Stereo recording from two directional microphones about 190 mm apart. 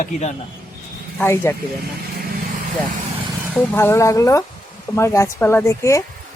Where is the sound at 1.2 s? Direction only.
15° left (ahead or behind).